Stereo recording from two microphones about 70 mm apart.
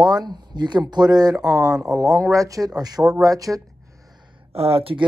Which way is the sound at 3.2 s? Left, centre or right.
Right.